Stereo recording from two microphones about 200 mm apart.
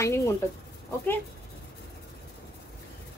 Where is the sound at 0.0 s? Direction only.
15° left (ahead or behind).